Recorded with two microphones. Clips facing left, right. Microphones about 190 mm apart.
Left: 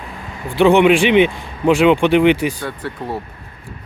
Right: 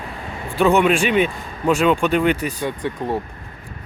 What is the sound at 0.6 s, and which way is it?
Speech, 15° left (ahead or behind).